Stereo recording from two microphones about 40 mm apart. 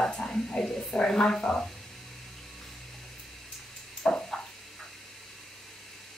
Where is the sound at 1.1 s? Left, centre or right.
Centre.